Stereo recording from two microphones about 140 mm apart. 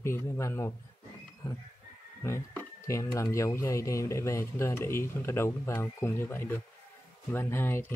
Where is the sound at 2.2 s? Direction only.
20° left (ahead or behind).